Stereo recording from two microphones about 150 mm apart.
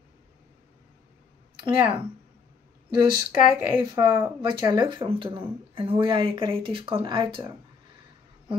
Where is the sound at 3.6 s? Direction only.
15° right (ahead or behind).